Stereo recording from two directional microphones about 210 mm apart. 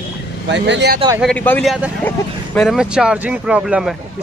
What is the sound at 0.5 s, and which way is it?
Speech, 55° right (ahead or behind).